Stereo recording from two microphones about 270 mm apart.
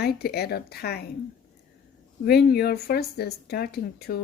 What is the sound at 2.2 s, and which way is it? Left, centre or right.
Speech, left.